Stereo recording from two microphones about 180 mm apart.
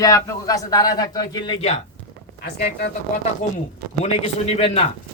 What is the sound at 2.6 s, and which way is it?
Speech, 65° left (ahead or behind).